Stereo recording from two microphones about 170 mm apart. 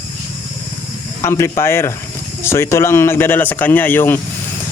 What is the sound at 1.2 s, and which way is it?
Speech, 15° left (ahead or behind).